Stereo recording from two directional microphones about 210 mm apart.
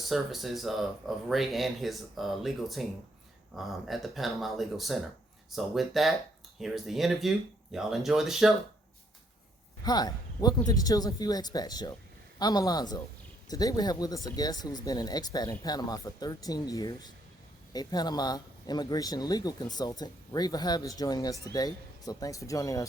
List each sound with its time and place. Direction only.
0.1 s speech: centre (ahead or behind)
9.8 s speech: 20° left (ahead or behind)